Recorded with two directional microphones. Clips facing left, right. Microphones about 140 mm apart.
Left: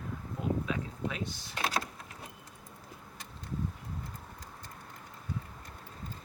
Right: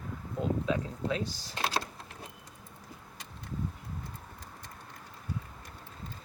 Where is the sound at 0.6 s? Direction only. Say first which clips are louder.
Right 3 dB; 30° right (ahead or behind).